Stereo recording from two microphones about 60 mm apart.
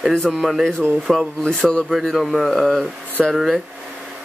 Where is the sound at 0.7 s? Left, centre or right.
Centre.